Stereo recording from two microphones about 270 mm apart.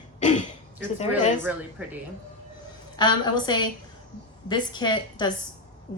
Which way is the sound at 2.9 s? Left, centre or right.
Centre.